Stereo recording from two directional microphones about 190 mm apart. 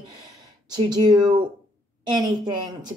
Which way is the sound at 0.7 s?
20° right (ahead or behind).